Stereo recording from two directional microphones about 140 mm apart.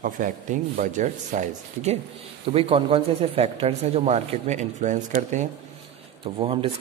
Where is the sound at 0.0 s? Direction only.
70° right (ahead or behind).